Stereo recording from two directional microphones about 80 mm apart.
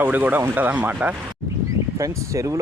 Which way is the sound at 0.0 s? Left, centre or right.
Right.